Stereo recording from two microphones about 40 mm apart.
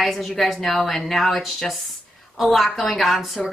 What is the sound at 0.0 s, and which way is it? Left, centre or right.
A woman's voice, centre.